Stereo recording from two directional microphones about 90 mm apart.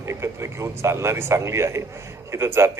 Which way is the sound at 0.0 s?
30° right (ahead or behind).